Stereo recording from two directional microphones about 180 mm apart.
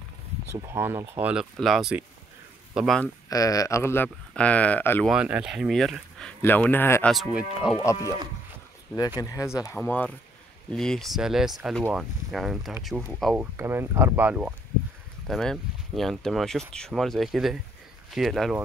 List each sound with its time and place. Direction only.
0.7 s a man's voice: 15° right (ahead or behind)
3.3 s speech: 20° left (ahead or behind)
5.0 s speech: 5° right (ahead or behind); by 7.1 s 10° left (ahead or behind)
7.1 s speech: centre (ahead or behind)
7.7 s speech: 15° left (ahead or behind)
9.2 s speech: 15° left (ahead or behind); by 13.5 s 5° right (ahead or behind)
13.6 s speech: 15° right (ahead or behind)